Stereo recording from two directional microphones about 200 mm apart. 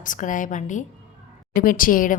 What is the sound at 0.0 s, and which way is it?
A woman's voice, 40° left (ahead or behind).